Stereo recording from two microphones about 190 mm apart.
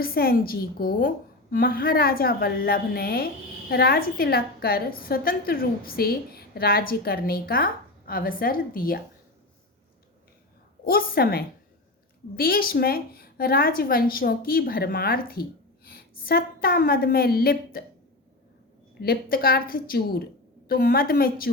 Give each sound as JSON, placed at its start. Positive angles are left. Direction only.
{"t": 0.0, "sound": "a woman's voice", "side_deg": 50}
{"t": 10.8, "sound": "a woman's voice", "side_deg": 50}
{"t": 19.0, "sound": "a woman's voice", "side_deg": 50}